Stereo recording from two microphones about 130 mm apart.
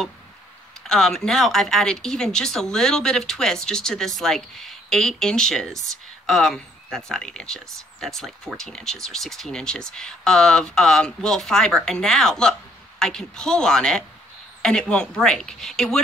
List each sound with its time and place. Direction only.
0.8 s speech: 5° left (ahead or behind)